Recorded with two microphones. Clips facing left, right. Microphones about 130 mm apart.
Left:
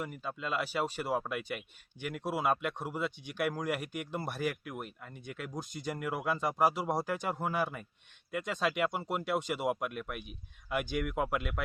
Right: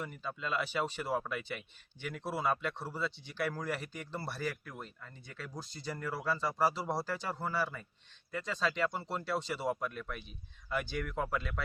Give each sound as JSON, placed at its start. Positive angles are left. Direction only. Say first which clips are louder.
{"t": 0.0, "sound": "speech", "louder": "left 2 dB", "side_deg": 10}